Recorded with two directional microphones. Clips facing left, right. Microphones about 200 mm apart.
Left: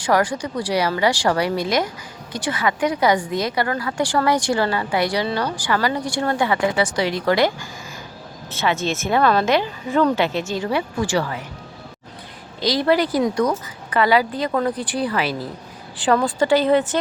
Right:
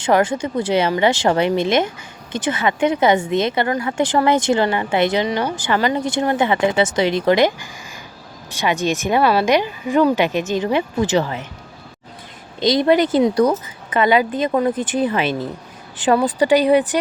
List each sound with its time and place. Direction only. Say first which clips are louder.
0.0 s speech: right 3 dB; 25° right (ahead or behind)
12.5 s speech: right 4 dB; 20° right (ahead or behind)